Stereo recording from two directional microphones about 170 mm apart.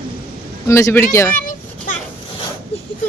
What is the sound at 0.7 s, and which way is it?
Speech, 15° left (ahead or behind).